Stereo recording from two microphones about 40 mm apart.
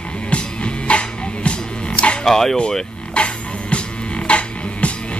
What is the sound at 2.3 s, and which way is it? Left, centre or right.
Speech, centre.